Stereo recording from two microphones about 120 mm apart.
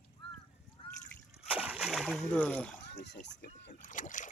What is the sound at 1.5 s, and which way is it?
Splash, 10° right (ahead or behind).